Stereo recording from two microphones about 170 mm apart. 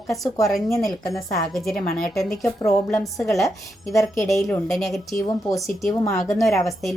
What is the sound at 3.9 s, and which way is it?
Speech, 20° left (ahead or behind).